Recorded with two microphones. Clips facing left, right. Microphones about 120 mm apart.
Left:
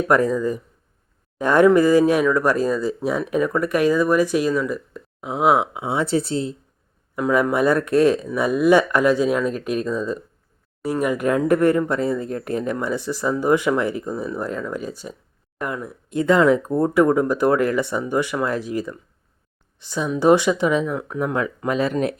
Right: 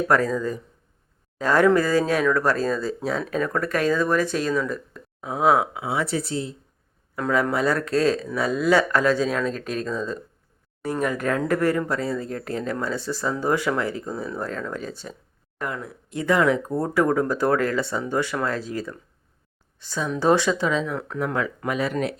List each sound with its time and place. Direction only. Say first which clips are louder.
0.1 s speech: left 5 dB; 15° left (ahead or behind)
7.2 s speech: left 4 dB; 15° left (ahead or behind)